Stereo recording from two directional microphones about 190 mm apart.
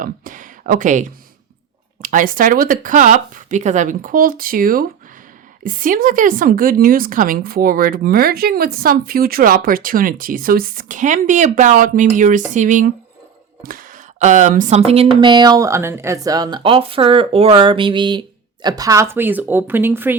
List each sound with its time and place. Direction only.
0.0 s a woman's voice: 45° right (ahead or behind); by 20.1 s 10° right (ahead or behind)